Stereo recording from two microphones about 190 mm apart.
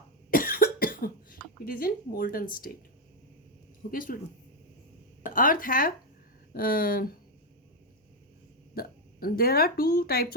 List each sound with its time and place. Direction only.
0.3 s cough: 50° left (ahead or behind)
3.9 s speech: 45° left (ahead or behind)
5.2 s speech: 45° left (ahead or behind)
8.7 s speech: 50° left (ahead or behind)